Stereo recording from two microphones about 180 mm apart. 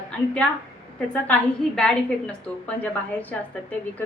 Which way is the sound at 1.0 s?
5° left (ahead or behind).